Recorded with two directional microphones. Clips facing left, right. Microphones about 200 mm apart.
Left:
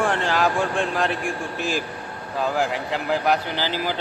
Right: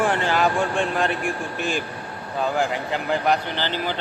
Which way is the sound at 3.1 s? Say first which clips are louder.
Even; 5° left (ahead or behind).